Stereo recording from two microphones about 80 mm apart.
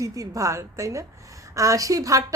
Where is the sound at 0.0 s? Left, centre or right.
Right.